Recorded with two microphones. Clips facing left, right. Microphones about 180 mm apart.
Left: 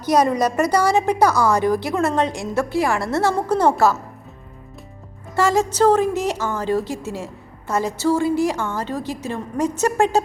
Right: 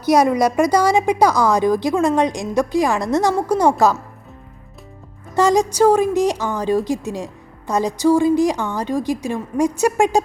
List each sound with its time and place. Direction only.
0.0 s a woman's voice: 10° right (ahead or behind)
5.3 s a woman's voice: 15° right (ahead or behind)